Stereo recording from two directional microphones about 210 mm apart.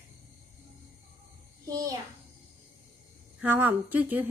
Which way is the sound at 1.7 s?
15° right (ahead or behind).